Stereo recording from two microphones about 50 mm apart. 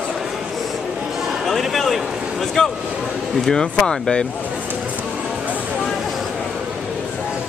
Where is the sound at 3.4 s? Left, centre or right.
Centre.